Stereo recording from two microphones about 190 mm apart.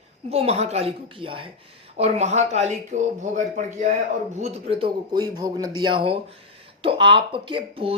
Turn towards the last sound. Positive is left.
turn(degrees=-25)  # may be behind; listen again after turning